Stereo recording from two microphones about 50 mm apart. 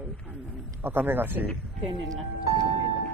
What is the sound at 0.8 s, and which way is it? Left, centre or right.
Speech, right.